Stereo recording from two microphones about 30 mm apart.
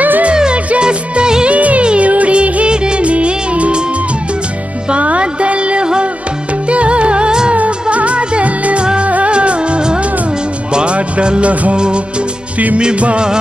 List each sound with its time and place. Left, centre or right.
0.3 s music: right
0.7 s music of bollywood: right
1.5 s music: right
2.7 s music of bollywood: right
3.1 s music of bollywood: right
4.9 s music: right